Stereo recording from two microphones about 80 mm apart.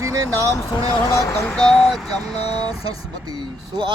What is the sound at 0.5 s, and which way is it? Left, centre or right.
Speech, left.